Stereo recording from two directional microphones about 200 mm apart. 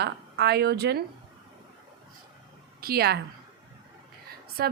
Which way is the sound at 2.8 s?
50° right (ahead or behind).